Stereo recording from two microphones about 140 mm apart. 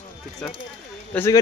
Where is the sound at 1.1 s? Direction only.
20° left (ahead or behind).